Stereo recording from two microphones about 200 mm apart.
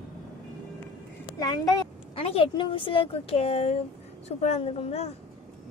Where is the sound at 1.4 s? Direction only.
20° left (ahead or behind).